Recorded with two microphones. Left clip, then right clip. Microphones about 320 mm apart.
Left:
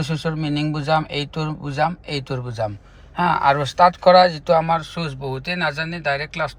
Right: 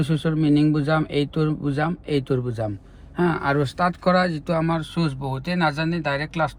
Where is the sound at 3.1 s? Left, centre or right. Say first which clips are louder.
Left 5 dB; centre.